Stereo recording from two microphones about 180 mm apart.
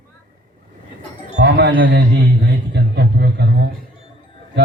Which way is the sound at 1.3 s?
70° right (ahead or behind).